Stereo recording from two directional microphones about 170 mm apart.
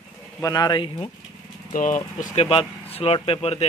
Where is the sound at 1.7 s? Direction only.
50° left (ahead or behind).